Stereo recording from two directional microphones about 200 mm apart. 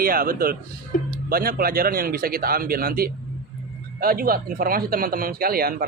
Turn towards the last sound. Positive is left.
turn(degrees=-50)  # may be behind; listen again after turning